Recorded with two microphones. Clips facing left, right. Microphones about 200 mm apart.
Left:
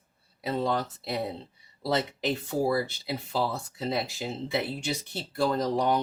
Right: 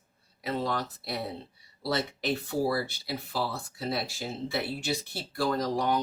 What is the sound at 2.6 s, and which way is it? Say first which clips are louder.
Speech: left 2 dB; 20° left (ahead or behind).